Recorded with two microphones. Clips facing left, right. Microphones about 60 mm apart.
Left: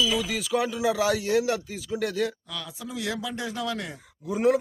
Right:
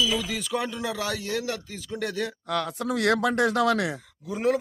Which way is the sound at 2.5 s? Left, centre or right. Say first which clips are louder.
Right 10 dB; right.